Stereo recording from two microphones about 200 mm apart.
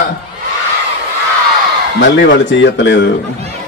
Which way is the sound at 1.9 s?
65° left (ahead or behind).